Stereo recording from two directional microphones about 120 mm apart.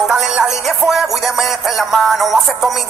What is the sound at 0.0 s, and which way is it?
Music, centre (ahead or behind).